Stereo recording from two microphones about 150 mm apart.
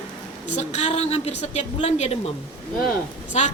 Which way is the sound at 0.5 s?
45° left (ahead or behind).